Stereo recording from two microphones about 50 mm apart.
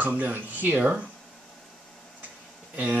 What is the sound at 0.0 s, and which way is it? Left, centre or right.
Speech, right.